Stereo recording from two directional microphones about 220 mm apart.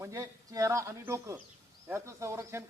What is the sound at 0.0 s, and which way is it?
Speech, 15° right (ahead or behind).